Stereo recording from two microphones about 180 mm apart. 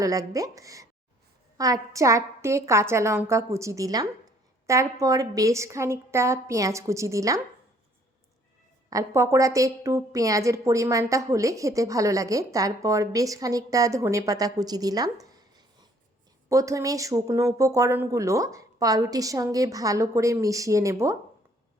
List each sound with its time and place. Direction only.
0.0 s a woman's voice: 20° right (ahead or behind)
8.9 s a woman's voice: 15° right (ahead or behind)